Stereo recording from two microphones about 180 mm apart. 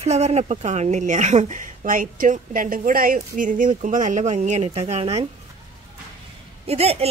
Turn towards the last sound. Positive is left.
turn(degrees=-35)  # may be behind; listen again after turning